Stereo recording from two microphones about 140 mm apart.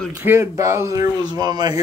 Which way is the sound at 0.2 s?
15° right (ahead or behind).